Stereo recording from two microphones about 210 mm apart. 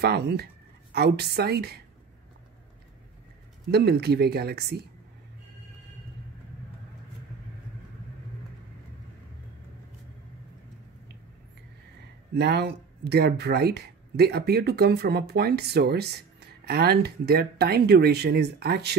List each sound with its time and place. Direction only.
0.0 s speech: 50° right (ahead or behind)
3.7 s speech: 50° right (ahead or behind)
12.4 s speech: 50° right (ahead or behind)